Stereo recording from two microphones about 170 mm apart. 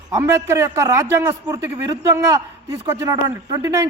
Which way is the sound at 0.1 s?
15° right (ahead or behind).